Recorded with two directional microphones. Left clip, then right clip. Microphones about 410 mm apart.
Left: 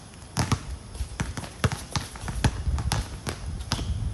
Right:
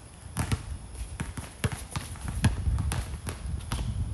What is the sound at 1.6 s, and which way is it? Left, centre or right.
Clip-clop, centre.